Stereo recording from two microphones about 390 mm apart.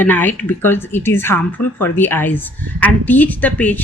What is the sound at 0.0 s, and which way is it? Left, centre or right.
Speech, centre.